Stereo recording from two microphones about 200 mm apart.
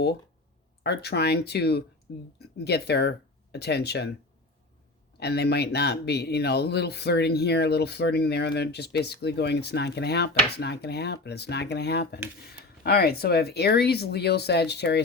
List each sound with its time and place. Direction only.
0.8 s speech: 55° left (ahead or behind)
5.2 s speech: 55° left (ahead or behind)